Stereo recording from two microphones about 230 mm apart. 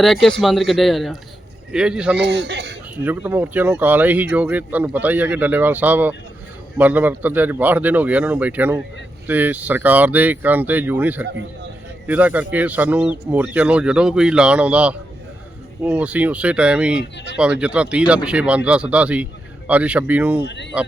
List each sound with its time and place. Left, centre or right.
0.0 s speech: centre
2.1 s a man's voice: right
2.9 s speech: centre
20.4 s speech: left